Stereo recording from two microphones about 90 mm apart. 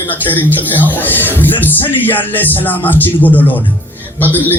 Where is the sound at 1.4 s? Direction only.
20° left (ahead or behind).